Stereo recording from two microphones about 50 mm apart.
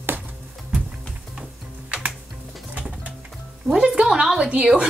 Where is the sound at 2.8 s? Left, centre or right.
Right.